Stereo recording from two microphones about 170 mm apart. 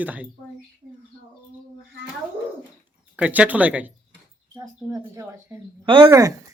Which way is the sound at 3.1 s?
5° right (ahead or behind).